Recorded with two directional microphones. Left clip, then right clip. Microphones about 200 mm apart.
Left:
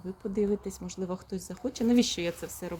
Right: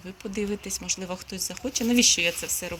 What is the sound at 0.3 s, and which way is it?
Speech, 35° left (ahead or behind).